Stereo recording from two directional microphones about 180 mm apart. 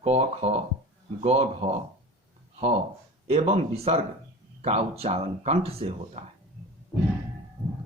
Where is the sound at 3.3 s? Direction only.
35° right (ahead or behind).